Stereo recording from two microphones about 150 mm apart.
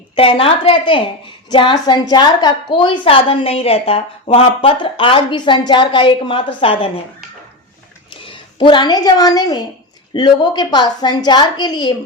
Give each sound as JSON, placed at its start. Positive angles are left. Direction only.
{"t": 0.2, "sound": "a woman's voice", "side_deg": 35}
{"t": 8.1, "sound": "a woman's voice", "side_deg": 35}